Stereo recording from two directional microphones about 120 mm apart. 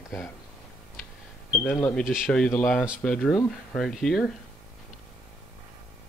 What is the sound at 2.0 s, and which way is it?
Speech, 5° right (ahead or behind).